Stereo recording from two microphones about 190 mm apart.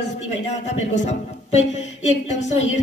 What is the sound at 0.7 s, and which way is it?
Speech, 35° left (ahead or behind).